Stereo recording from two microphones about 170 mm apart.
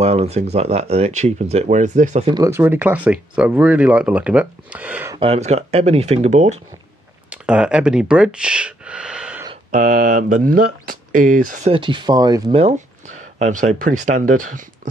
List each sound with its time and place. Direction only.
0.0 s speech: 40° right (ahead or behind)
2.3 s speech: 15° right (ahead or behind)
5.1 s speech: 35° right (ahead or behind)
7.2 s a sound: 5° right (ahead or behind)
9.7 s speech: 50° right (ahead or behind)
11.7 s speech: 30° right (ahead or behind)
12.5 s speech: 40° right (ahead or behind)